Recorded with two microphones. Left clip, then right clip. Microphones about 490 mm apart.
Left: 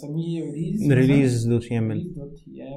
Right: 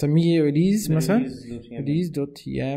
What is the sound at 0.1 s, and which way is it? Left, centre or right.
Speech, right.